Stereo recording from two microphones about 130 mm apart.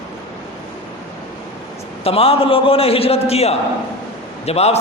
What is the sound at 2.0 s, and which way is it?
A man's voice, 45° left (ahead or behind).